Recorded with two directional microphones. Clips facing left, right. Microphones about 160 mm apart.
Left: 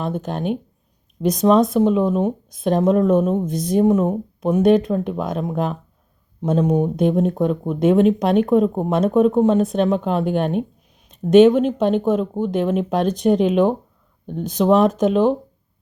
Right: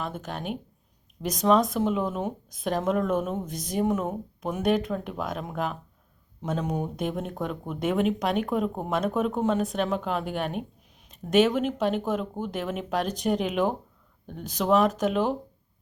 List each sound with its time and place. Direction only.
0.0 s speech: 30° left (ahead or behind)